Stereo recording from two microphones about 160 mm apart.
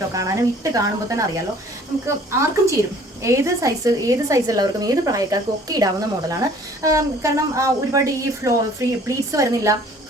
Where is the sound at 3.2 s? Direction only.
20° right (ahead or behind).